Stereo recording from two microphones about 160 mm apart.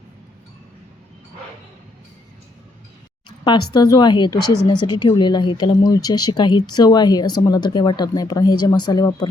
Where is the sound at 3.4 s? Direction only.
25° left (ahead or behind).